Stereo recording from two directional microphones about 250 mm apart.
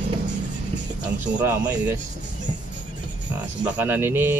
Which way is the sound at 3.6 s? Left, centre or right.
Centre.